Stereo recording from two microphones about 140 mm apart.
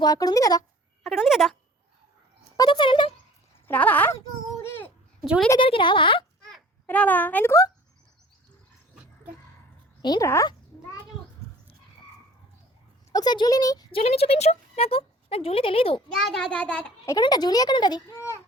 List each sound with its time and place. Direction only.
0.0 s a child's voice: 30° left (ahead or behind)
1.0 s a child's voice: centre (ahead or behind)
2.6 s speech: 35° left (ahead or behind)
3.7 s a sound: 10° left (ahead or behind)
5.5 s speech: 40° left (ahead or behind)
6.8 s speech: 10° left (ahead or behind)
10.0 s a child's voice: 30° left (ahead or behind)
13.1 s a child's voice: 30° left (ahead or behind)
13.9 s speech: 45° left (ahead or behind)
16.0 s a child's voice: centre (ahead or behind)
17.1 s a child's voice: 30° left (ahead or behind)